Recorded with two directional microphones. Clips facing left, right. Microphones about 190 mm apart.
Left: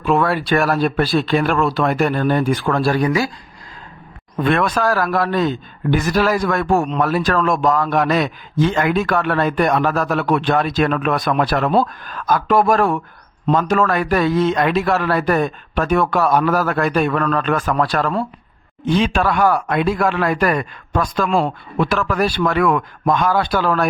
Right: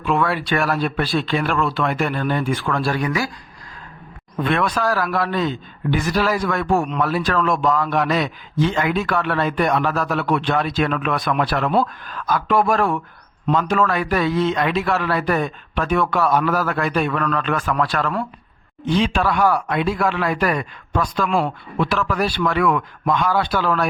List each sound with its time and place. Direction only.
0.0 s speech: 40° left (ahead or behind)
4.4 s a man's voice: 45° left (ahead or behind)
18.9 s a man's voice: 50° left (ahead or behind)
21.2 s a man's voice: 35° left (ahead or behind)